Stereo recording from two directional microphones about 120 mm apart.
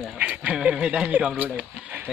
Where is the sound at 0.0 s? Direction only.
5° right (ahead or behind).